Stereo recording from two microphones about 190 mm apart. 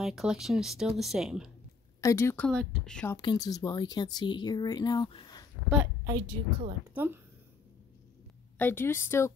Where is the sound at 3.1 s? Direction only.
20° left (ahead or behind).